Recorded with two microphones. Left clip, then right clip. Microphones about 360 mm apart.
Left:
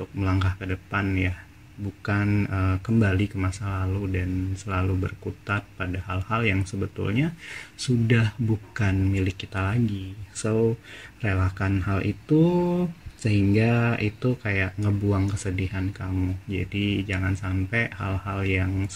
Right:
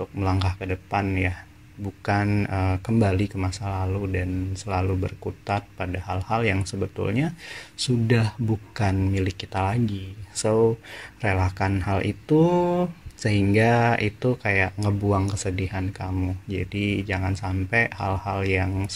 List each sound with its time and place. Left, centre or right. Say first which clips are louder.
0.2 s speech: right 1 dB; centre
2.0 s speech: right 3 dB; centre
12.4 s mantra: right 3 dB; right
13.2 s speech: right 3 dB; centre